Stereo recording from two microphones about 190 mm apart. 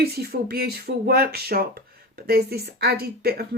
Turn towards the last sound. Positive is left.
turn(degrees=-55)  # may be behind; listen again after turning